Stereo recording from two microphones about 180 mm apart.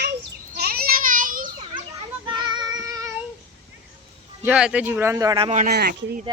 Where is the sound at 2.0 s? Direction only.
25° right (ahead or behind).